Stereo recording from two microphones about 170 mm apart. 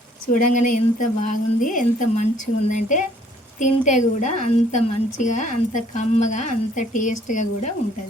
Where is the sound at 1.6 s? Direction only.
50° left (ahead or behind).